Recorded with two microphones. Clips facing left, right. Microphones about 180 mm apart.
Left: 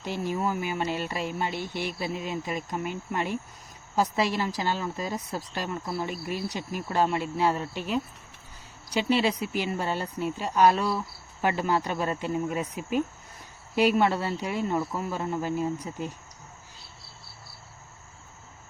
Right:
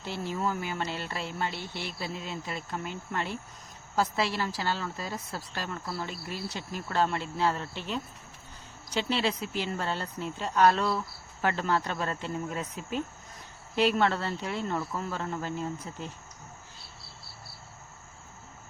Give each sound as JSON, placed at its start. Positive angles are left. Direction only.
{"t": 0.0, "sound": "speech", "side_deg": 15}